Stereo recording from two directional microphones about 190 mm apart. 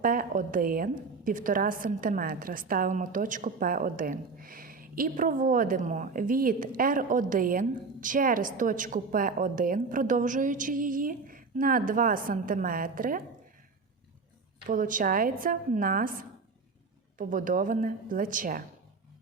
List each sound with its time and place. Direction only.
0.0 s a woman's voice: 45° right (ahead or behind)
14.7 s a woman's voice: 45° right (ahead or behind)
17.2 s a woman's voice: 45° right (ahead or behind)